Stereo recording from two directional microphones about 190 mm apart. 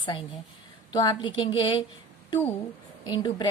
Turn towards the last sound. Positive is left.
turn(degrees=20)  # may be behind; listen again after turning